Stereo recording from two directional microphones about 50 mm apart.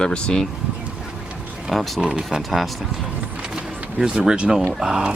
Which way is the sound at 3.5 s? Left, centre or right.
Centre.